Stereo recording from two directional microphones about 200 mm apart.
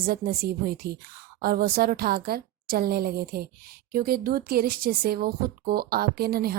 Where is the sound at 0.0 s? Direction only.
50° right (ahead or behind).